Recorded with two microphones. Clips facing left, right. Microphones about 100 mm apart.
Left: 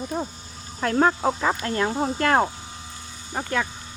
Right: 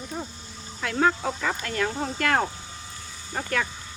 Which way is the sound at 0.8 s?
40° left (ahead or behind).